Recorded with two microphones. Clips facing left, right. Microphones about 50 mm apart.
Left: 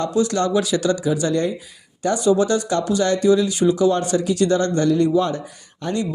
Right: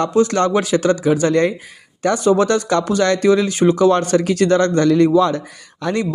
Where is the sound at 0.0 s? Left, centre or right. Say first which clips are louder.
Right 4 dB; right.